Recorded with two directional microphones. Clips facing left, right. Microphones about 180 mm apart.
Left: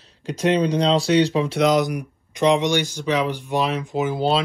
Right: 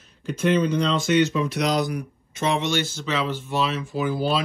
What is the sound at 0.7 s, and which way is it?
Speech, 35° left (ahead or behind).